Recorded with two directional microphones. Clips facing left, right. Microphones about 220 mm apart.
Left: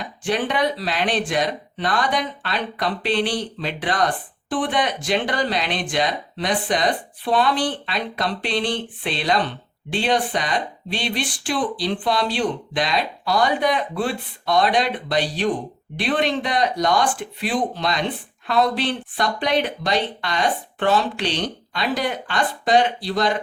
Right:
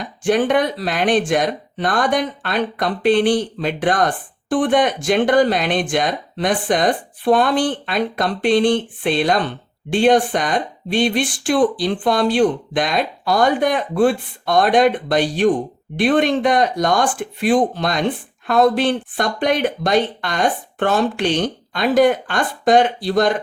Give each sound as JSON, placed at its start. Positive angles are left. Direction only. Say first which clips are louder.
{"t": 0.3, "sound": "speech", "louder": "right 6 dB", "side_deg": -50}